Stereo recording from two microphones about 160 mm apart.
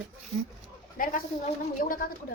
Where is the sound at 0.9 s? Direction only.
55° left (ahead or behind).